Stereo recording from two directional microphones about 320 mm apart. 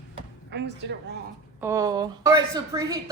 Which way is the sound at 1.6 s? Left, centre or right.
Centre.